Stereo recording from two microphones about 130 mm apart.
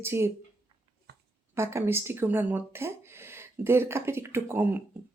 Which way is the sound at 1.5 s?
20° right (ahead or behind).